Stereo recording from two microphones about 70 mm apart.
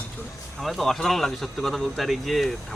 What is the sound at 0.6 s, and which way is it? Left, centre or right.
Speech, centre.